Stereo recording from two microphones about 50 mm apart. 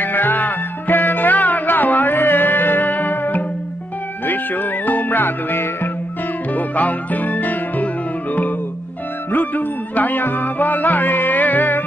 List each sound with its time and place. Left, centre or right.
0.0 s music: left
6.5 s music: left